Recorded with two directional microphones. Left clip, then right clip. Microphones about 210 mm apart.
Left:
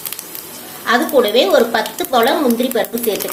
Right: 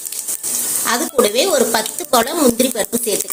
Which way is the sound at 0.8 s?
40° right (ahead or behind).